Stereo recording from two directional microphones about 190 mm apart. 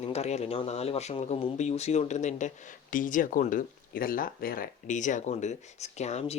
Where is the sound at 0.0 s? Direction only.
35° left (ahead or behind).